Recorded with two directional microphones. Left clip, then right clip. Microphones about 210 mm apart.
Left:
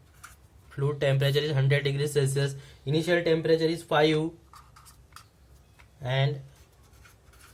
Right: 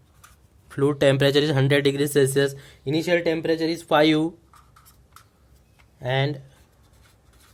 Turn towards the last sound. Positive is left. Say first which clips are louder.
# right 5 dB
turn(degrees=-45)  # may be behind; listen again after turning